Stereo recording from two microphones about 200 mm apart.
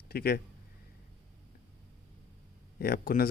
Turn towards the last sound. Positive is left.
turn(degrees=45)  # may be behind; listen again after turning